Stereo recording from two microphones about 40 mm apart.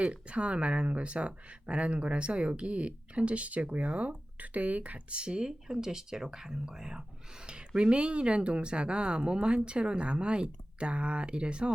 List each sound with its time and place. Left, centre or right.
0.0 s speech: right
5.2 s speech: right